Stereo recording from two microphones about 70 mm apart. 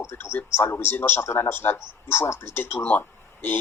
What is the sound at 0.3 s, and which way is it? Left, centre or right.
Speech, left.